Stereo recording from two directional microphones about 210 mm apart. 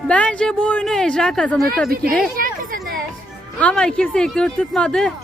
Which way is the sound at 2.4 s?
45° right (ahead or behind).